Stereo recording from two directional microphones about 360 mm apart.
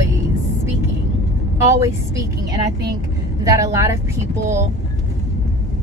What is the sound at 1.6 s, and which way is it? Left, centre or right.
Speech, centre.